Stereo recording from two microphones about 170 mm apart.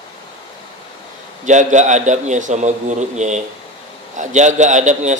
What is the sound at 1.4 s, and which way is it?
A man's voice, 45° right (ahead or behind).